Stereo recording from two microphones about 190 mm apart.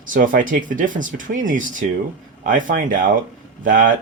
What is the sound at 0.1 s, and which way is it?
Speech, 45° right (ahead or behind).